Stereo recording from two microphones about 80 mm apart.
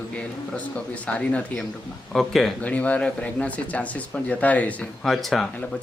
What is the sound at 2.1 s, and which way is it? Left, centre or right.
Speech, centre.